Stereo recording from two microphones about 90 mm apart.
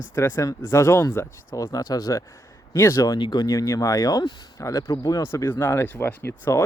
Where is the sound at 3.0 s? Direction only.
50° left (ahead or behind).